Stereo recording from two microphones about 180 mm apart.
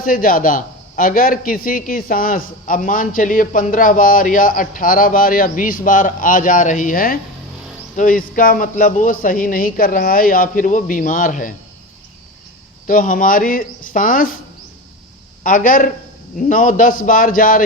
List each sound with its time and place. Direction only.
0.0 s a man's voice: 50° left (ahead or behind)
12.9 s a man's voice: 50° left (ahead or behind)
15.4 s a man's voice: 50° left (ahead or behind)